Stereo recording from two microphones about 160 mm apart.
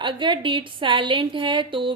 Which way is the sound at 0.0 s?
30° right (ahead or behind).